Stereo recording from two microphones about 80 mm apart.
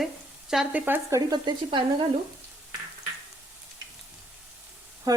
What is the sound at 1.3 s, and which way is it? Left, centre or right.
Speech, right.